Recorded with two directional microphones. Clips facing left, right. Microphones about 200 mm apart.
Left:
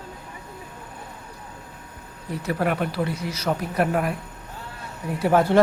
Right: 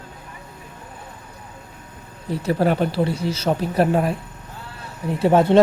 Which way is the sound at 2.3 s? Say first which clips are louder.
Right 5 dB; 30° right (ahead or behind).